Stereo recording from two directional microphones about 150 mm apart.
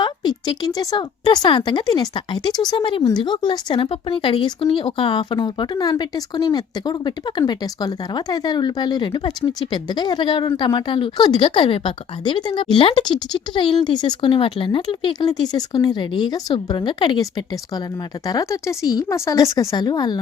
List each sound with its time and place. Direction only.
0.0 s speech: 30° left (ahead or behind)